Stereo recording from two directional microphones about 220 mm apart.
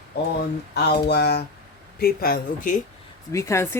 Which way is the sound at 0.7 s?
45° left (ahead or behind).